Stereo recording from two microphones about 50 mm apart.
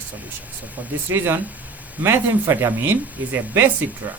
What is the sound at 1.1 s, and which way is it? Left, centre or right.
Speech, right.